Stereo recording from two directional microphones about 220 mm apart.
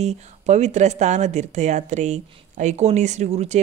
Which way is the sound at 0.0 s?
30° right (ahead or behind).